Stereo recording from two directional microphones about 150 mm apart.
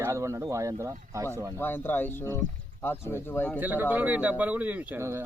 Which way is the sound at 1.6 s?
15° left (ahead or behind).